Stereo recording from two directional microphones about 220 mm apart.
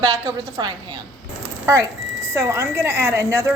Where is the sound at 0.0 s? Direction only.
25° right (ahead or behind).